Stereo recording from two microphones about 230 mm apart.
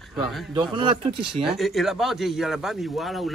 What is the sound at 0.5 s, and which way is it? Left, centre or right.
Speech, centre.